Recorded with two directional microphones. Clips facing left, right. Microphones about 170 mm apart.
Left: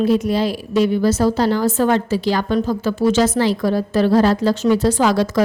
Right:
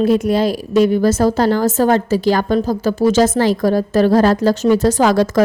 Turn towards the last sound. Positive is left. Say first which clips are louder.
# right 3 dB
turn(degrees=-45)  # may be behind; listen again after turning